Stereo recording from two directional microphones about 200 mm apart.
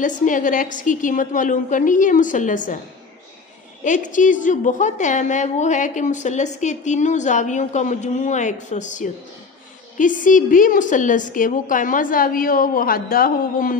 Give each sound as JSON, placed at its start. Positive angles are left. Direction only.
{"t": 0.0, "sound": "a woman's voice", "side_deg": 40}
{"t": 3.8, "sound": "a woman's voice", "side_deg": 40}